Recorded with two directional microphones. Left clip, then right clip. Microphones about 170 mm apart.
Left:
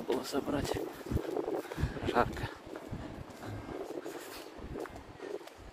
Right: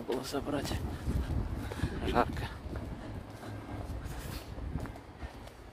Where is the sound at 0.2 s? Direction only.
15° right (ahead or behind).